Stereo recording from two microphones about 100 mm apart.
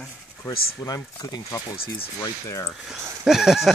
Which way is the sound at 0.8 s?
35° left (ahead or behind).